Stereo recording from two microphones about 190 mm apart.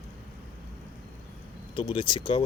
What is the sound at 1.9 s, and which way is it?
Speech, 25° left (ahead or behind).